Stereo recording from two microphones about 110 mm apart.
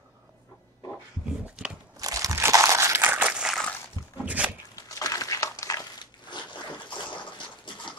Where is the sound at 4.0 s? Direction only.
35° left (ahead or behind).